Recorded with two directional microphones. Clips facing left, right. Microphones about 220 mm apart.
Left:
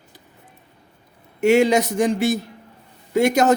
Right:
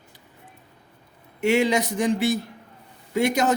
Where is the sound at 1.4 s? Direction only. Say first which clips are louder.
Left 5 dB; 45° left (ahead or behind).